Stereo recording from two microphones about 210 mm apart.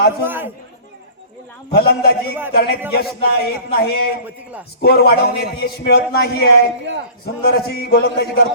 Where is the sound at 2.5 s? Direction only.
50° left (ahead or behind).